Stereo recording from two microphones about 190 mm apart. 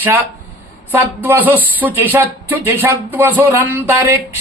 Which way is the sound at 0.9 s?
10° right (ahead or behind).